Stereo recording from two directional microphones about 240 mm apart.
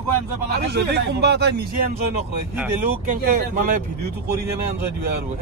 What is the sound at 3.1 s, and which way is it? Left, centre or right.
Speech, right.